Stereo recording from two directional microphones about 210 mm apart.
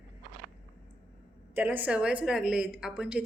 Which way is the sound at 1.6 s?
10° right (ahead or behind).